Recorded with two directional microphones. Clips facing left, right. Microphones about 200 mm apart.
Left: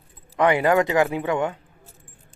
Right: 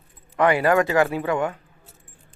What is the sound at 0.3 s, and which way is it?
Speech, 20° left (ahead or behind).